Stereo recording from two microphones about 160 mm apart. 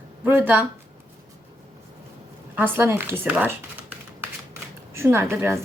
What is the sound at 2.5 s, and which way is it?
Speech, 15° right (ahead or behind).